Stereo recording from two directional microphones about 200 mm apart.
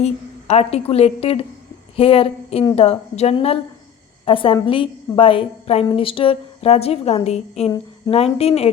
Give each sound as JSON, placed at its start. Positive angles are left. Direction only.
{"t": 0.0, "sound": "a woman's voice", "side_deg": 30}